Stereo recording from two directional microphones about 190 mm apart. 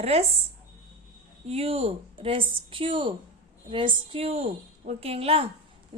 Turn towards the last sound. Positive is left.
turn(degrees=-30)  # may be behind; listen again after turning